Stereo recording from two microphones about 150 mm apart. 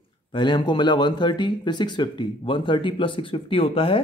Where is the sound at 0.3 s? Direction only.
30° left (ahead or behind).